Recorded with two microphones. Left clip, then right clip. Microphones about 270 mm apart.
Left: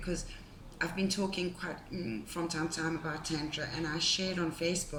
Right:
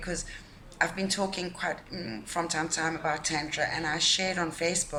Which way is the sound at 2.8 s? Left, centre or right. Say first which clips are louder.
Right 7 dB; right.